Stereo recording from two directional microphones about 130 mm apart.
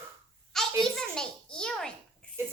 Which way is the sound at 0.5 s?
5° left (ahead or behind).